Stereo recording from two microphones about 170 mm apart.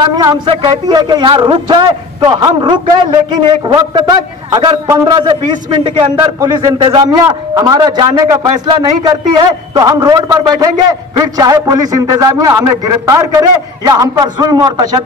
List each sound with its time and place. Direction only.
0.0 s a man's voice: 20° right (ahead or behind)